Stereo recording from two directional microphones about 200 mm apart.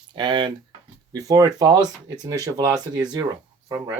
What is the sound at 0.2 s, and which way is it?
Speech, 25° right (ahead or behind).